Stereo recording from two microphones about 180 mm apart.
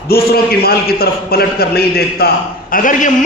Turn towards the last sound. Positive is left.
turn(degrees=50)  # may be behind; listen again after turning